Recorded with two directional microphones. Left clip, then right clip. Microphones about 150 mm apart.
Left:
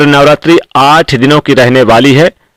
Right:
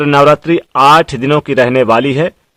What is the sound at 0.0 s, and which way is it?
A man's voice, 30° left (ahead or behind).